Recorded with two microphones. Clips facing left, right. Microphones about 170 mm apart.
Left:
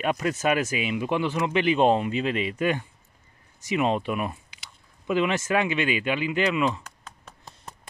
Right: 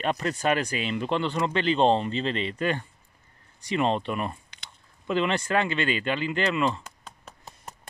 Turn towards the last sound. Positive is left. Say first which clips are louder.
# left 1 dB
turn(degrees=5)  # may be behind; listen again after turning